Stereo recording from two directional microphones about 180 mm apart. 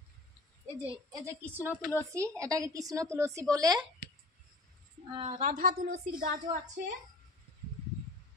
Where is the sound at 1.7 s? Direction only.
5° right (ahead or behind).